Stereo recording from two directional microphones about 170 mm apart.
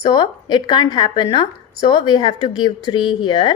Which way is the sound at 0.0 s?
25° left (ahead or behind).